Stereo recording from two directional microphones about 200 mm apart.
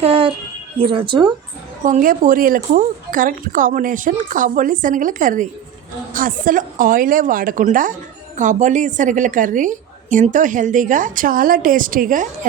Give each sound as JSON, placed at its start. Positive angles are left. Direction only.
{"t": 0.0, "sound": "speech", "side_deg": -30}
{"t": 1.8, "sound": "a woman's voice", "side_deg": -40}